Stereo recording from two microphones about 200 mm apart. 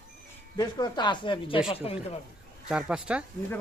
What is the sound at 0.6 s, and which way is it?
Speech, 20° left (ahead or behind).